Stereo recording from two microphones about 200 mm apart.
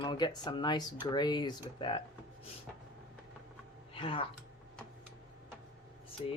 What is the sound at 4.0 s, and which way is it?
Speech, 25° left (ahead or behind).